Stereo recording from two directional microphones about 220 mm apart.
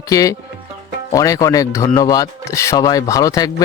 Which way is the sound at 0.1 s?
15° left (ahead or behind).